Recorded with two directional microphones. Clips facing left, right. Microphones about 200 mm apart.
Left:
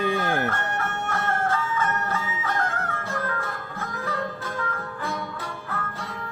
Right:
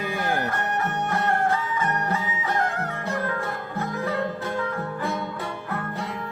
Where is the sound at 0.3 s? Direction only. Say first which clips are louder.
Even; 15° right (ahead or behind).